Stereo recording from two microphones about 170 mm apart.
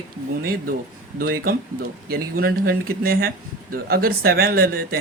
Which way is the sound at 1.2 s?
60° right (ahead or behind).